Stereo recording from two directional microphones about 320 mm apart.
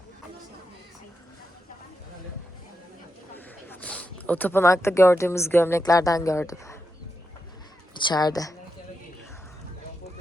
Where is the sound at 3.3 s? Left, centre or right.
Centre.